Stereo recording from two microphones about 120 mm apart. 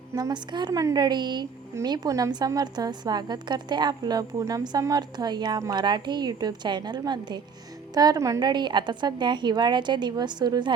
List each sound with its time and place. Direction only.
0.2 s a woman's voice: 35° right (ahead or behind)